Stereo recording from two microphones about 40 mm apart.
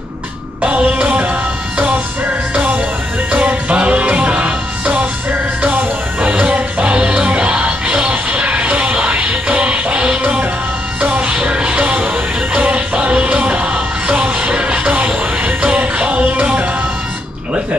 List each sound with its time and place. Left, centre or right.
0.6 s music: right
2.5 s music: right
6.2 s music: right